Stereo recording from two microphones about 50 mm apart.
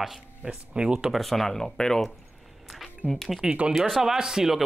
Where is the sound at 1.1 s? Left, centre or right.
Centre.